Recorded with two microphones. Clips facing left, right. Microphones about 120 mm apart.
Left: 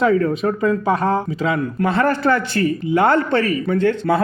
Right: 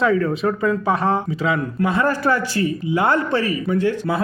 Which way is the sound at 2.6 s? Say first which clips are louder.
Left 3 dB; 50° left (ahead or behind).